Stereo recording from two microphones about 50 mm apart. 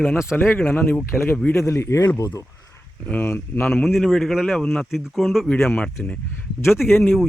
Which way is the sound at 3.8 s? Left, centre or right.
Centre.